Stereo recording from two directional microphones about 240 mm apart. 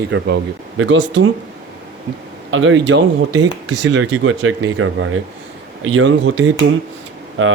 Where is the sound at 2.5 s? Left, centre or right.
Right.